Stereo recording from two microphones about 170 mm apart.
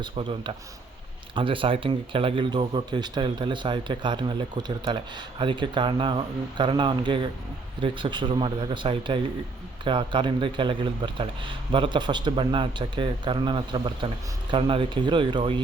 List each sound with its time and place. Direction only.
0.0 s speech: 30° right (ahead or behind)